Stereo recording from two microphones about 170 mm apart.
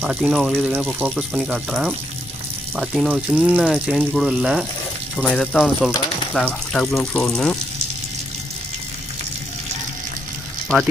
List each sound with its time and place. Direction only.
0.0 s speech: 5° right (ahead or behind)